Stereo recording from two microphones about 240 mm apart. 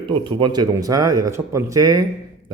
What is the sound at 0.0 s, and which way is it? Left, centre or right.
A man's voice, right.